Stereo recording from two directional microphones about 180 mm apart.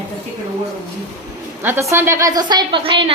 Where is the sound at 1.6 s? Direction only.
15° right (ahead or behind); by 3.1 s 30° right (ahead or behind).